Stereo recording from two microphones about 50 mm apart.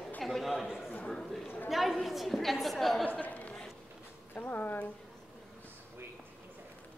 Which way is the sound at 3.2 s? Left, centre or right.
Left.